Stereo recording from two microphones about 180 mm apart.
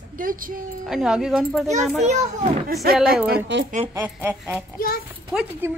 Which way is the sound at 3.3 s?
80° right.